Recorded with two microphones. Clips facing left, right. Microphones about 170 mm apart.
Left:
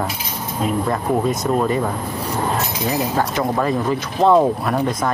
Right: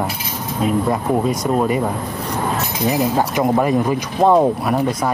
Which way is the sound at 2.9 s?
15° right (ahead or behind).